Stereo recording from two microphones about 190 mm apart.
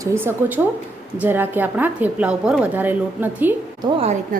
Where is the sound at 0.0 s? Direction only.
15° right (ahead or behind).